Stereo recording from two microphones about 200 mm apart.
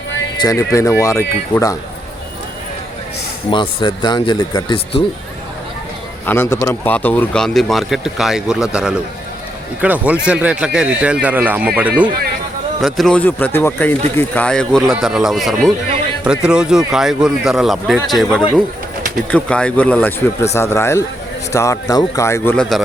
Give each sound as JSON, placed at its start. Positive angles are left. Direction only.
{"t": 0.3, "sound": "a man's voice", "side_deg": 15}
{"t": 3.5, "sound": "speech", "side_deg": 25}
{"t": 6.2, "sound": "speech", "side_deg": 10}
{"t": 19.3, "sound": "a man's voice", "side_deg": 5}